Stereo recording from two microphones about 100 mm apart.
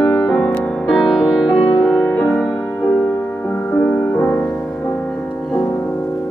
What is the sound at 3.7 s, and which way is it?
Music, 20° left (ahead or behind).